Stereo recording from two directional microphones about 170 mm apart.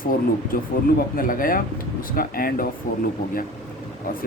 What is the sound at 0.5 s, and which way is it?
Speech, 55° left (ahead or behind).